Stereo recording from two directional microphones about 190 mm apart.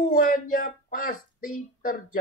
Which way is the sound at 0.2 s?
45° left (ahead or behind).